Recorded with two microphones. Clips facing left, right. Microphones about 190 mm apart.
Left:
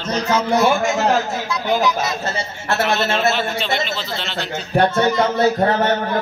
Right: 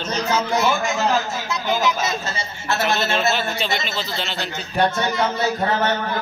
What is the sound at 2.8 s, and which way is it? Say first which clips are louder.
A man's voice: left 2 dB; centre (ahead or behind).